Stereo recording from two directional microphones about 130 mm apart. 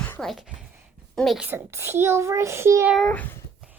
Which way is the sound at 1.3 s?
15° right (ahead or behind).